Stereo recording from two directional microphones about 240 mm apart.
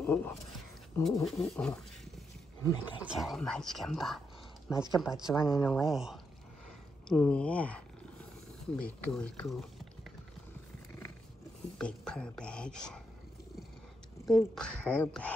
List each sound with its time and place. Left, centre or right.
0.0 s speech: centre
2.6 s speech: centre
3.0 s speech: centre
5.3 s speech: centre
5.7 s speech: centre
9.0 s speech: centre
11.8 s speech: centre
14.2 s speech: centre